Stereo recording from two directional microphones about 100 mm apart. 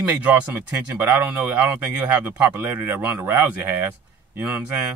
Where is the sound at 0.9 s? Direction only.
20° right (ahead or behind).